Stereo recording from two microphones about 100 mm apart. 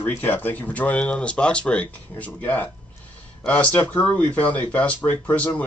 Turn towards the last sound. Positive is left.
turn(degrees=15)  # may be behind; listen again after turning